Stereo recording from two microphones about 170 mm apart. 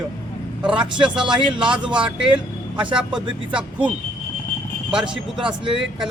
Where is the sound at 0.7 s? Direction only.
30° right (ahead or behind).